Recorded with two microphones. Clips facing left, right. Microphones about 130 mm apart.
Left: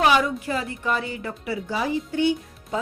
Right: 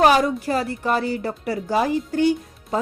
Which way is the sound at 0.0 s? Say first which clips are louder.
Right 4 dB; 40° right (ahead or behind).